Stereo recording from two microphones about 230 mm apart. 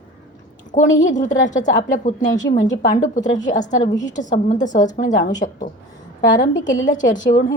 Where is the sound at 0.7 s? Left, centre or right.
Left.